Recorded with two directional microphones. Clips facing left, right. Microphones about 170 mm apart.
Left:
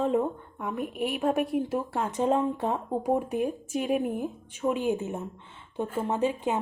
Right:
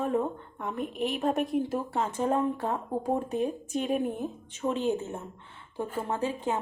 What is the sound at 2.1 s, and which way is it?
Speech, 20° left (ahead or behind).